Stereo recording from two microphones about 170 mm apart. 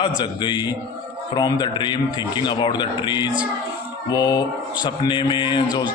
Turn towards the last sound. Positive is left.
turn(degrees=25)  # may be behind; listen again after turning